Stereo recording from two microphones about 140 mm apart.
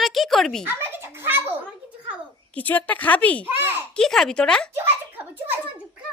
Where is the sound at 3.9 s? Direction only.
5° left (ahead or behind).